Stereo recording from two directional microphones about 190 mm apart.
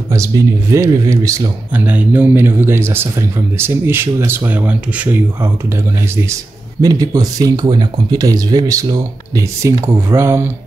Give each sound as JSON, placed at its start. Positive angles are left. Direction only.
{"t": 0.1, "sound": "speech", "side_deg": -15}
{"t": 6.8, "sound": "speech", "side_deg": -20}